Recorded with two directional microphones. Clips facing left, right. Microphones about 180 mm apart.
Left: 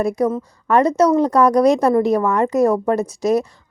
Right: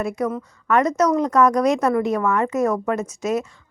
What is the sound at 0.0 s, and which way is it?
A woman's voice, 35° left (ahead or behind).